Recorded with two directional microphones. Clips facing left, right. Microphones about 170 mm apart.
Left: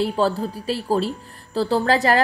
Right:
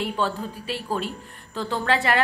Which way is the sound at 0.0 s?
35° left (ahead or behind).